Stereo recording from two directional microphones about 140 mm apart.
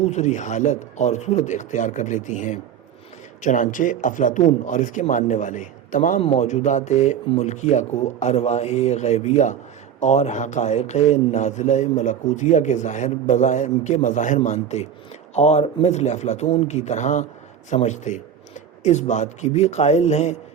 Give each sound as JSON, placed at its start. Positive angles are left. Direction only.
{"t": 0.0, "sound": "a man's voice", "side_deg": 55}
{"t": 6.1, "sound": "a man's voice", "side_deg": 50}